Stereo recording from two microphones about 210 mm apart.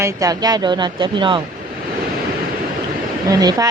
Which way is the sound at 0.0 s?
15° right (ahead or behind).